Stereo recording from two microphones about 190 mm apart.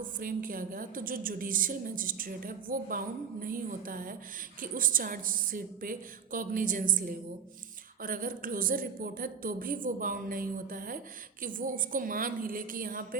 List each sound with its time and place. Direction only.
0.2 s a woman's voice: 45° right (ahead or behind)